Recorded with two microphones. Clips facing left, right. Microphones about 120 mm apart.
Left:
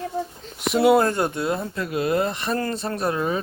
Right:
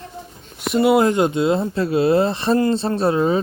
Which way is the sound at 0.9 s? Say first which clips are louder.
Right 4 dB; 15° right (ahead or behind).